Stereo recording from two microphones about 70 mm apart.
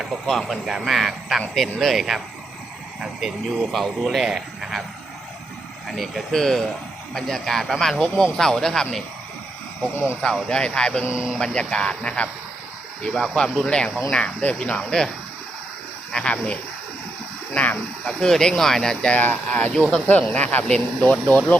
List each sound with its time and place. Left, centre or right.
0.3 s speech: centre
5.9 s speech: centre
10.2 s speech: centre
11.1 s speech: centre
11.3 s speech: centre
16.1 s speech: centre
18.2 s speech: centre
19.1 s speech: left
19.7 s speech: centre